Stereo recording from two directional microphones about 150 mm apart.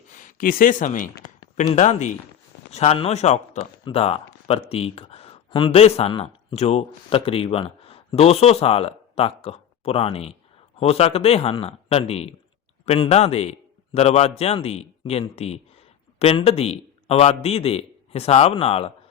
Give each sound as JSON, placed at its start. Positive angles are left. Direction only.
{"t": 0.1, "sound": "a man's voice", "side_deg": 60}